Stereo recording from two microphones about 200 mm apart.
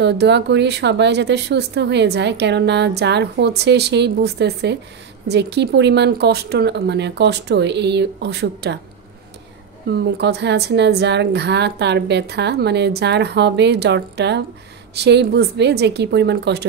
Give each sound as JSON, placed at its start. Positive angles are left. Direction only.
{"t": 0.0, "sound": "speech", "side_deg": -60}
{"t": 9.8, "sound": "speech", "side_deg": -60}